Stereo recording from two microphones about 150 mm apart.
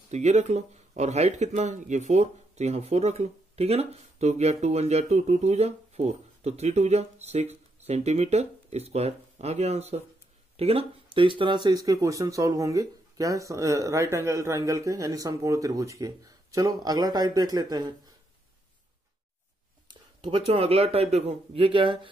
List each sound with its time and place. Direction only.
0.1 s speech: 50° right (ahead or behind); by 17.9 s 25° right (ahead or behind)
19.9 s speech: 35° right (ahead or behind)